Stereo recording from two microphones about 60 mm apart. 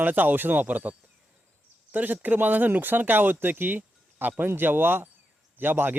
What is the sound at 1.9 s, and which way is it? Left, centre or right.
Speech, right.